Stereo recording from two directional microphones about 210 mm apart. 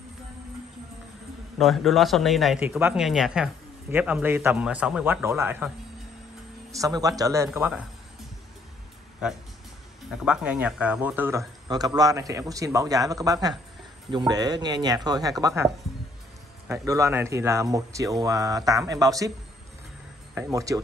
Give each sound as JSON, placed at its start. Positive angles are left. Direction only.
{"t": 1.6, "sound": "speech", "side_deg": 0}
{"t": 6.7, "sound": "speech", "side_deg": -15}
{"t": 10.2, "sound": "speech", "side_deg": -5}
{"t": 20.3, "sound": "speech", "side_deg": -15}